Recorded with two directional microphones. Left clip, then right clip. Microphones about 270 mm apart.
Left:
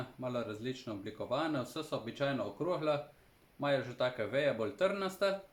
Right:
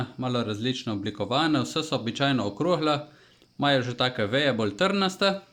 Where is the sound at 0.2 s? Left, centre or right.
Right.